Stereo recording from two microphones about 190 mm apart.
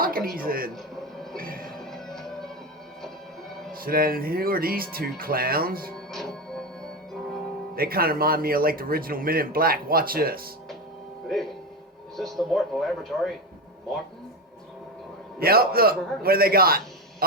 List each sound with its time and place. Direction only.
0.0 s music: 50° right (ahead or behind)
0.9 s television: centre (ahead or behind)
1.4 s music: 50° right (ahead or behind)
1.8 s music: centre (ahead or behind)
3.7 s a man's voice: 50° right (ahead or behind)
6.1 s music: centre (ahead or behind)
7.8 s a man's voice: 50° right (ahead or behind)
12.1 s speech: centre (ahead or behind)
15.4 s a man's voice: 50° right (ahead or behind)